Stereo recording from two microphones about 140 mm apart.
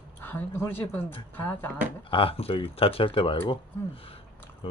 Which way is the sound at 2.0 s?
40° left (ahead or behind).